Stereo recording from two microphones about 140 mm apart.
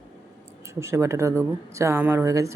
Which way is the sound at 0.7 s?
20° right (ahead or behind).